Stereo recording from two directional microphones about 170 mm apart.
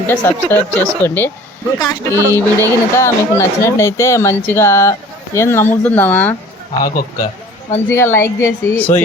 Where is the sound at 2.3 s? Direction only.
15° left (ahead or behind).